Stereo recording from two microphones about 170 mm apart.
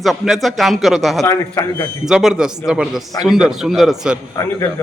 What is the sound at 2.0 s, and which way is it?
Speech, 5° right (ahead or behind).